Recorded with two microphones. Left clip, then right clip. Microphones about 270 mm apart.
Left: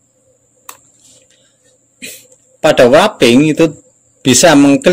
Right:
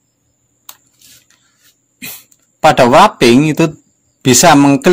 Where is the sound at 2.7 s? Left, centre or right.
Right.